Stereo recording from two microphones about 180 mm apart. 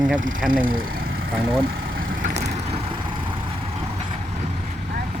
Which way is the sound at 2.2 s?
40° right (ahead or behind).